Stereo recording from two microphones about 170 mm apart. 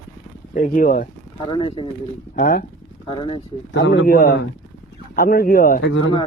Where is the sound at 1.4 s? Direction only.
30° left (ahead or behind).